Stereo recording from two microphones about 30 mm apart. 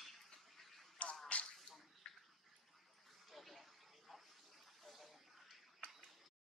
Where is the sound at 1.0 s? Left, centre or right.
Left.